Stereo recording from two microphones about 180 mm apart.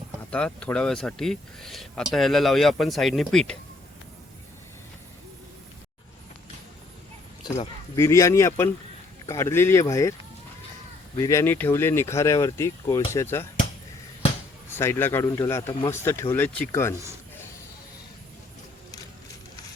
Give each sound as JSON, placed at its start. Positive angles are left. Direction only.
{"t": 0.3, "sound": "speech", "side_deg": 5}
{"t": 7.4, "sound": "speech", "side_deg": 25}
{"t": 11.2, "sound": "speech", "side_deg": 15}
{"t": 14.7, "sound": "speech", "side_deg": 15}
{"t": 16.9, "sound": "a man's voice", "side_deg": -15}